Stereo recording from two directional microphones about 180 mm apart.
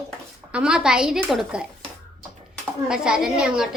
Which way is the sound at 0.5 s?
5° right (ahead or behind).